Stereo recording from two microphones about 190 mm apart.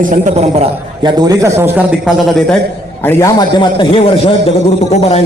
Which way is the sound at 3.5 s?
25° left (ahead or behind).